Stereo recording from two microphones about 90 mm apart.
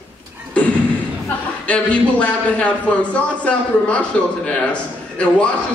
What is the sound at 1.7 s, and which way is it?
A man's voice, 15° left (ahead or behind).